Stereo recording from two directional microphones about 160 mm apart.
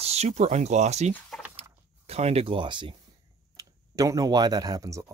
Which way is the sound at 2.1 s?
40° right (ahead or behind).